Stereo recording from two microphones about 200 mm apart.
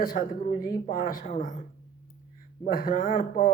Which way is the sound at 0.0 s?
45° left (ahead or behind).